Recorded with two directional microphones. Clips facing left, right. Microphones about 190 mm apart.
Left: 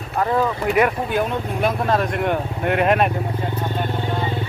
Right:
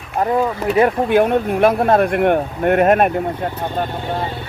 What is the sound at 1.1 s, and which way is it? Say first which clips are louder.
Speech: right 8 dB; 60° right (ahead or behind).